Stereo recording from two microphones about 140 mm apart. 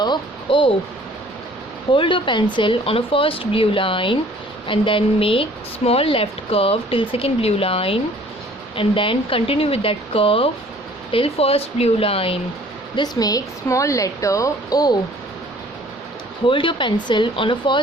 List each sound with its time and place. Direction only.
0.0 s speech: 35° left (ahead or behind)
1.9 s speech: 35° left (ahead or behind)
13.0 s a woman's voice: 25° left (ahead or behind)
16.5 s speech: 35° left (ahead or behind)